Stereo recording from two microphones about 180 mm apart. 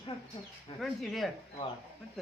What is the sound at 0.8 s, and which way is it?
Speech, centre (ahead or behind).